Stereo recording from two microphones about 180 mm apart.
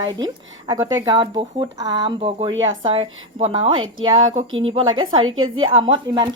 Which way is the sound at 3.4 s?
30° right (ahead or behind).